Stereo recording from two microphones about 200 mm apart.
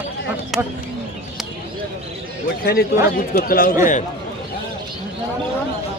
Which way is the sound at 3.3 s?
50° left (ahead or behind).